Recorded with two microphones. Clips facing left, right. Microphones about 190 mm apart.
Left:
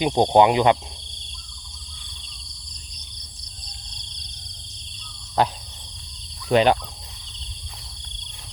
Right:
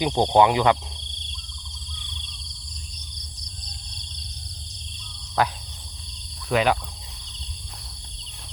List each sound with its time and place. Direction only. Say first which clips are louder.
0.0 s speech: left 2 dB; 20° left (ahead or behind)
6.5 s speech: left 4 dB; 30° left (ahead or behind)